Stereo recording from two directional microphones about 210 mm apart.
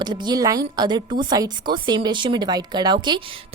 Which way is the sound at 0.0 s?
20° right (ahead or behind).